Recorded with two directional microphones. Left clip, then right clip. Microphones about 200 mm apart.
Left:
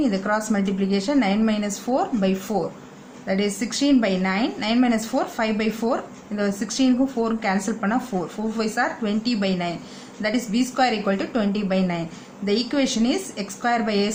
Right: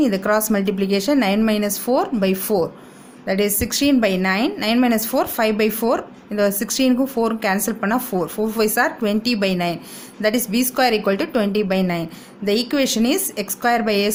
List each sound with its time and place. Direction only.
0.0 s speech: 50° right (ahead or behind)